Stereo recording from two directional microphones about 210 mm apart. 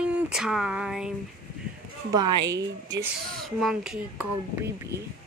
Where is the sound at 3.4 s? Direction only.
Centre (ahead or behind).